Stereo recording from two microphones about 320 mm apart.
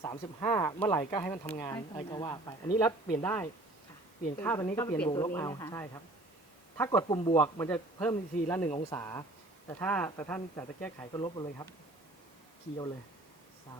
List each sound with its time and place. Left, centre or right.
0.0 s speech: centre